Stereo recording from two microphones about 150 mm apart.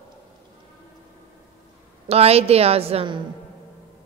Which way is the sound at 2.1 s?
40° right (ahead or behind).